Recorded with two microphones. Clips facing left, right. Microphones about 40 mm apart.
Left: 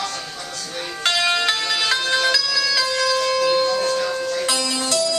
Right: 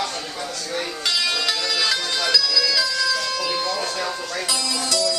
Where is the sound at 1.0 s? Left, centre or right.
Left.